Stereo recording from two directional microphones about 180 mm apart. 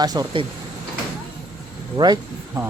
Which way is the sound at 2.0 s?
25° right (ahead or behind).